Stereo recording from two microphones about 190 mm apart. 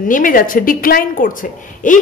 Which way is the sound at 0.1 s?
45° left (ahead or behind).